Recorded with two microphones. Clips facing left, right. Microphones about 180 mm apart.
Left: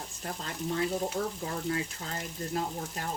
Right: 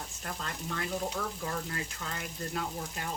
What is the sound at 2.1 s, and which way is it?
Speech, 35° left (ahead or behind).